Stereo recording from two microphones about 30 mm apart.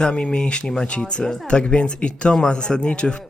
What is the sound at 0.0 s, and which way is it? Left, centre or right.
Speech, left.